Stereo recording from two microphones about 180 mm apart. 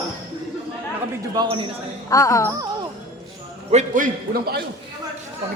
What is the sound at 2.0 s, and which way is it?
Speech, 20° left (ahead or behind).